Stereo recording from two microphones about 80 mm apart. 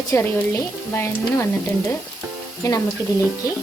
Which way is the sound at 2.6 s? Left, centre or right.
Left.